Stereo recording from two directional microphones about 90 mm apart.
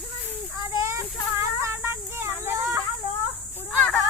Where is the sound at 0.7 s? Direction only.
35° right (ahead or behind).